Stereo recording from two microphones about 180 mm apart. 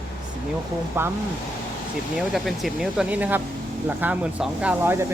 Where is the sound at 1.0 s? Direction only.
15° right (ahead or behind).